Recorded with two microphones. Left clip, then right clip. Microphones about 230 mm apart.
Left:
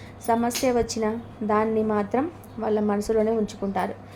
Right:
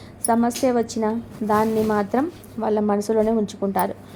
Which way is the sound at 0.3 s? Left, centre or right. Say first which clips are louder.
Right 3 dB; centre.